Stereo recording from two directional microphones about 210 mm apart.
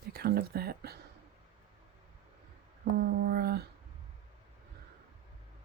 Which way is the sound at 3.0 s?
45° right (ahead or behind).